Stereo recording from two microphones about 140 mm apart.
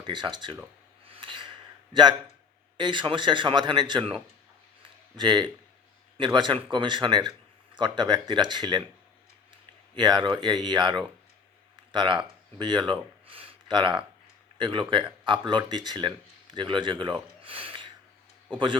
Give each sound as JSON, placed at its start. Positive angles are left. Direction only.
{"t": 0.0, "sound": "a man's voice", "side_deg": -35}
{"t": 1.0, "sound": "gasp", "side_deg": -40}
{"t": 2.7, "sound": "a man's voice", "side_deg": -35}
{"t": 4.8, "sound": "a sound", "side_deg": -35}
{"t": 6.1, "sound": "a man's voice", "side_deg": -35}
{"t": 9.9, "sound": "a man's voice", "side_deg": -35}